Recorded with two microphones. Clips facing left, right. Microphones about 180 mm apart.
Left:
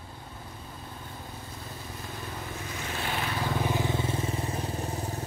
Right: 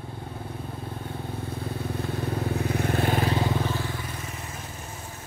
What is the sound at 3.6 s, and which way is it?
Vehicle, 20° left (ahead or behind).